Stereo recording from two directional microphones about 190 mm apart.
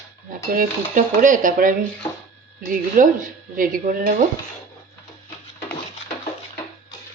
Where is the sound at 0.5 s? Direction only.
45° right (ahead or behind).